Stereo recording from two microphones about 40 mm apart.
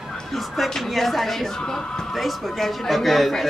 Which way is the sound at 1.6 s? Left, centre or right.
Centre.